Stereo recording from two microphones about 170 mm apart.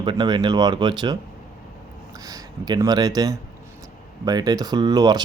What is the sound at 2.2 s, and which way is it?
Speech, 20° right (ahead or behind).